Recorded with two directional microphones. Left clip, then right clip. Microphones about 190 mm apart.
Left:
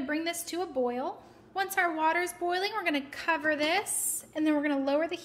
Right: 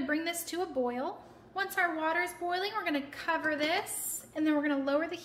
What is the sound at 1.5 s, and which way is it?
A woman's voice, 40° left (ahead or behind).